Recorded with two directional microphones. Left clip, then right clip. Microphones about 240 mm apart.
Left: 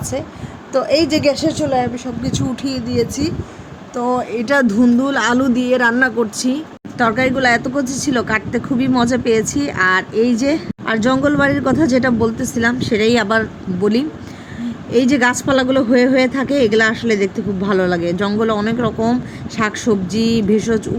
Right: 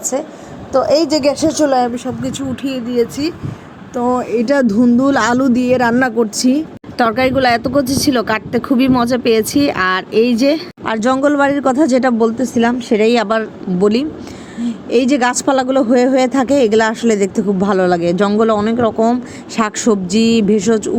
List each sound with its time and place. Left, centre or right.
0.7 s speech: centre
1.1 s speech: centre
2.6 s speech: centre